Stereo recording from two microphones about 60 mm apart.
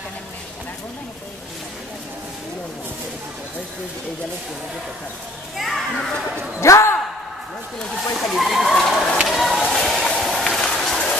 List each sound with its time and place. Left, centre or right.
5.6 s children playing: centre
6.6 s speech: left
7.8 s speech: centre
9.3 s a sound: centre